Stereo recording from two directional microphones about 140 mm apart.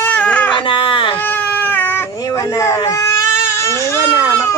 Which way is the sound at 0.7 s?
35° left (ahead or behind).